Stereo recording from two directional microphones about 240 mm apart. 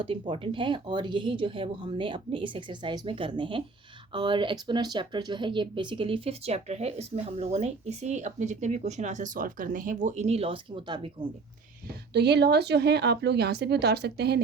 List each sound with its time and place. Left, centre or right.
0.0 s speech: right
12.1 s a woman's voice: right